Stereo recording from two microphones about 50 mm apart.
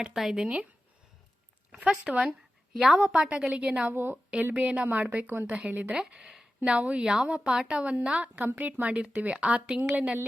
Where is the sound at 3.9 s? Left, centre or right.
Right.